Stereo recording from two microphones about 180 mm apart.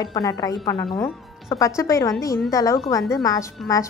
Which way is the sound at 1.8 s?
15° left (ahead or behind).